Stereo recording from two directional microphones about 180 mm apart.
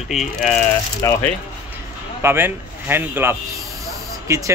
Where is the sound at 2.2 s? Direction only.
15° right (ahead or behind).